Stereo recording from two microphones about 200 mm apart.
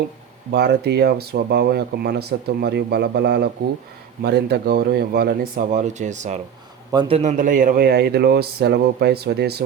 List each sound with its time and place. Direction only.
0.5 s speech: 55° right (ahead or behind); by 6.4 s 35° right (ahead or behind)
6.9 s a man's voice: 20° right (ahead or behind)
7.2 s speech: 35° right (ahead or behind); by 9.6 s 55° right (ahead or behind)